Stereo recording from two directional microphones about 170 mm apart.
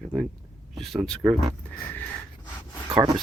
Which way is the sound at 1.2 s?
15° right (ahead or behind).